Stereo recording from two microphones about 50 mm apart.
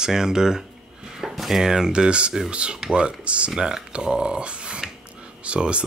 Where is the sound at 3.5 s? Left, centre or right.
Centre.